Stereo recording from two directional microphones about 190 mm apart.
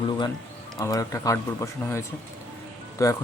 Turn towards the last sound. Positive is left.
turn(degrees=15)  # may be behind; listen again after turning